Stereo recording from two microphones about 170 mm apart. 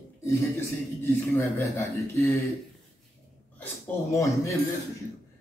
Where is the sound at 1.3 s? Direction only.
15° left (ahead or behind).